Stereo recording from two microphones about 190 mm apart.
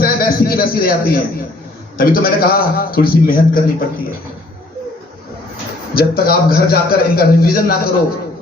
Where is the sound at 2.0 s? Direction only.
50° left (ahead or behind).